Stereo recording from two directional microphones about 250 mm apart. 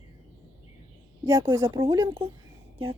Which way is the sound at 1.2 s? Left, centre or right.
Centre.